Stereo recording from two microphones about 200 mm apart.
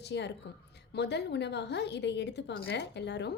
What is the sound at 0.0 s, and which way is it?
A woman's voice, 60° left (ahead or behind).